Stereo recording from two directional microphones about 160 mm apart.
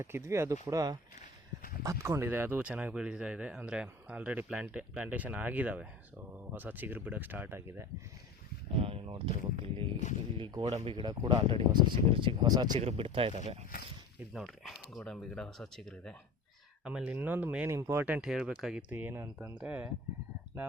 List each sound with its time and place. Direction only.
0.0 s speech: 15° right (ahead or behind)
8.8 s speech: 35° right (ahead or behind)
12.8 s speech: 35° right (ahead or behind)
13.3 s speech: 45° right (ahead or behind)
14.3 s speech: centre (ahead or behind)
16.8 s speech: 10° right (ahead or behind)